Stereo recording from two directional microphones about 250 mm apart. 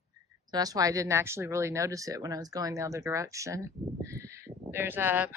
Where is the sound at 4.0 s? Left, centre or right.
Centre.